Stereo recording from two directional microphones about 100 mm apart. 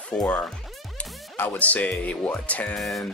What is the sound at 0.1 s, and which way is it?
Speech, 10° left (ahead or behind).